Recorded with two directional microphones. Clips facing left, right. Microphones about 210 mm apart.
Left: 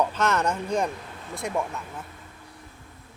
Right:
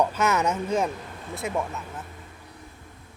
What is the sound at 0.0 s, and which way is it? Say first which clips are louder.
Speech: right 1 dB; 10° right (ahead or behind).